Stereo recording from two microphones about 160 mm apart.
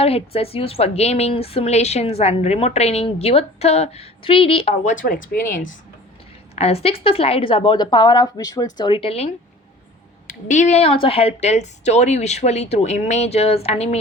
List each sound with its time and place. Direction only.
0.0 s a woman's voice: 40° left (ahead or behind); by 5.6 s 65° left (ahead or behind)
6.6 s a woman's voice: 40° left (ahead or behind)
10.2 s a woman's voice: 50° left (ahead or behind)